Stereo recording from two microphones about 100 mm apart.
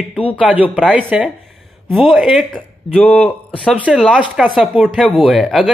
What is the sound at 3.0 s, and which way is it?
A man's voice, 15° left (ahead or behind).